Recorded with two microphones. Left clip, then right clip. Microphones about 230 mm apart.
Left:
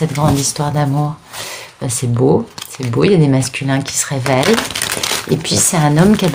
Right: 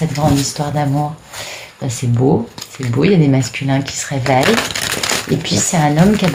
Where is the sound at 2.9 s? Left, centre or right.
Left.